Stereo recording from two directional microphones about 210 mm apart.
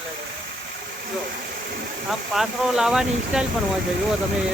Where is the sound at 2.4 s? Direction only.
5° right (ahead or behind).